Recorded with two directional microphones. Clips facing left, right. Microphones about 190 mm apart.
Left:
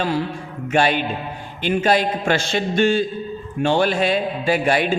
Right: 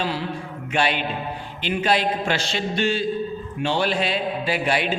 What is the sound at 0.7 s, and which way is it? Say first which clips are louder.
A man's voice: left 5 dB; 45° left (ahead or behind).